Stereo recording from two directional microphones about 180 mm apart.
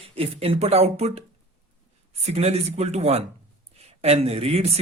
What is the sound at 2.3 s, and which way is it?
A man's voice, 35° right (ahead or behind).